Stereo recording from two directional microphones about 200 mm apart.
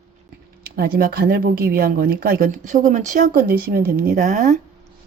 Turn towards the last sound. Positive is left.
turn(degrees=-40)  # may be behind; listen again after turning